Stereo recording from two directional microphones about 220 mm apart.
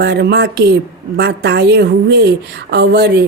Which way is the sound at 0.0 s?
50° right (ahead or behind).